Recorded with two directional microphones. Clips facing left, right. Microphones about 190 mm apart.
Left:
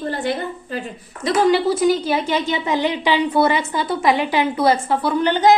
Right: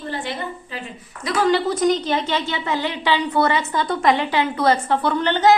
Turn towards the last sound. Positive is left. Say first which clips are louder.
# left 1 dB
turn(degrees=15)  # may be behind; listen again after turning